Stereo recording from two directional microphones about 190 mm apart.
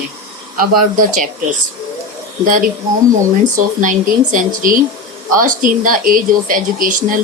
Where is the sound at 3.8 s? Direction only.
45° right (ahead or behind).